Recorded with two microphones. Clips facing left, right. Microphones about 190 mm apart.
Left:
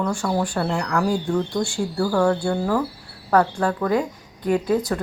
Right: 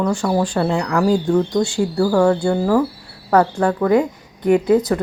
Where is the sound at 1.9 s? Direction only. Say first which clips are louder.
Right 4 dB; 10° right (ahead or behind).